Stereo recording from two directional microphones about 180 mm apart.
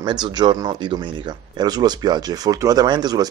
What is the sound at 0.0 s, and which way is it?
Speech, 25° right (ahead or behind).